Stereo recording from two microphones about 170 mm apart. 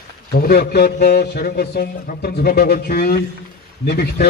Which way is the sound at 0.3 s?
65° left (ahead or behind).